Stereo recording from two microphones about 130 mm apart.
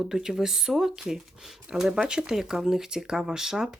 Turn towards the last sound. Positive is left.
turn(degrees=-5)  # may be behind; listen again after turning